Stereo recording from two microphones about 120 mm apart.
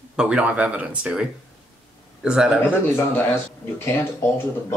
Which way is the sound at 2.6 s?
15° left (ahead or behind).